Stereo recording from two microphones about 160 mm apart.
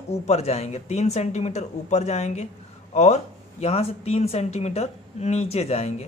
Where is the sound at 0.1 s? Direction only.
40° left (ahead or behind).